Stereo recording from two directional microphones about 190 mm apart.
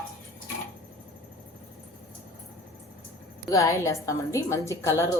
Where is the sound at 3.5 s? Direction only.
15° left (ahead or behind).